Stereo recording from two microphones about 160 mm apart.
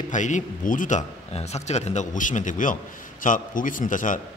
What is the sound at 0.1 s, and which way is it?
A man's voice, 50° left (ahead or behind).